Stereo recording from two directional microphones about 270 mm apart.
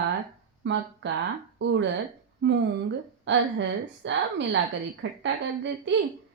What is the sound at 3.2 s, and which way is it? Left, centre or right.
Speech, right.